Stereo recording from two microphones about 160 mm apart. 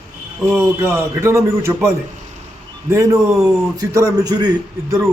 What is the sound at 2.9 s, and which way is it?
A man's voice, 20° right (ahead or behind).